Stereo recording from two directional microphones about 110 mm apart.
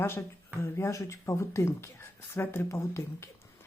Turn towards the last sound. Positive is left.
turn(degrees=25)  # may be behind; listen again after turning